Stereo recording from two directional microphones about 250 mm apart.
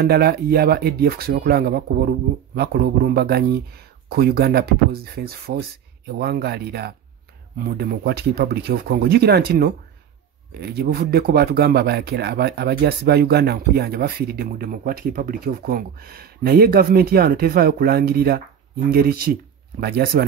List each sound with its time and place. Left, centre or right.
0.0 s a man's voice: right